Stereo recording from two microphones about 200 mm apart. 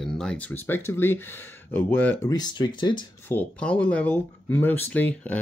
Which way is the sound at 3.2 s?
5° left (ahead or behind).